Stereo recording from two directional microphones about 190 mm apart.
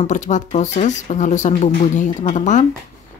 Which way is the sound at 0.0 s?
40° left (ahead or behind).